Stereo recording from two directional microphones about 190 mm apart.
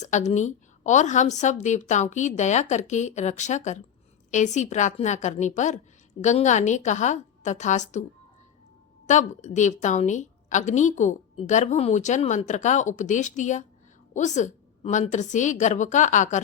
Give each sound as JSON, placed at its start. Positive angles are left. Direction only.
{"t": 0.0, "sound": "a woman's voice", "side_deg": 40}
{"t": 9.0, "sound": "a woman's voice", "side_deg": 40}